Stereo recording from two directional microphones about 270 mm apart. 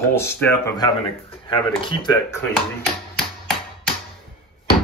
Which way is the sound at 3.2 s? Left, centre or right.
Centre.